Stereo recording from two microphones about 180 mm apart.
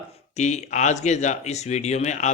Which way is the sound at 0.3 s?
40° left (ahead or behind).